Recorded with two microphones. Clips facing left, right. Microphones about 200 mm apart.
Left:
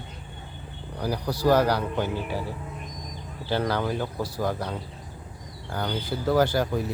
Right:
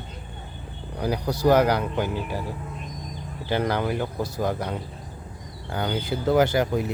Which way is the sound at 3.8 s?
10° right (ahead or behind).